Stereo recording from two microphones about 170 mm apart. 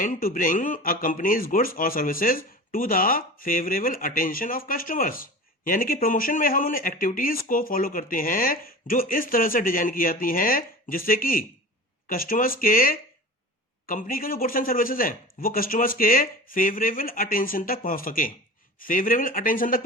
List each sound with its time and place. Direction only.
0.0 s speech: 55° left (ahead or behind)